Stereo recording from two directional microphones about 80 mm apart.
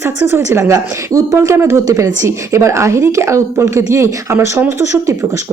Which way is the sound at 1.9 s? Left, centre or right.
Right.